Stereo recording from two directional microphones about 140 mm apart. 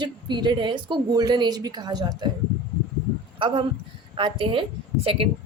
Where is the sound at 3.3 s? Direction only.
35° right (ahead or behind).